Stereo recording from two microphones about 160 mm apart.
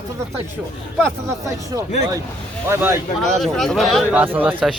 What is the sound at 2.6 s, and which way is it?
Speech, 15° right (ahead or behind).